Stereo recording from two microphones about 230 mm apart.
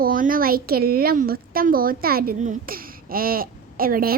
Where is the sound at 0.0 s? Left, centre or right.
Right.